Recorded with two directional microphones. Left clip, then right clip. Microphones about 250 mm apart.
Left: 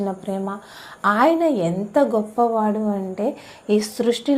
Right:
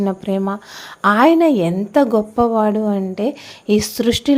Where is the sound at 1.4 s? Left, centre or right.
Right.